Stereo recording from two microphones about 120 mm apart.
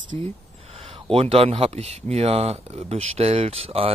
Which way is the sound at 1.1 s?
55° right (ahead or behind).